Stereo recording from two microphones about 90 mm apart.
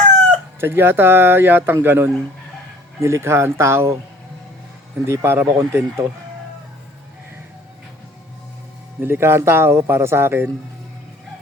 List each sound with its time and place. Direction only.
0.6 s speech: 25° right (ahead or behind)
5.0 s speech: 30° right (ahead or behind)
9.0 s speech: 25° right (ahead or behind)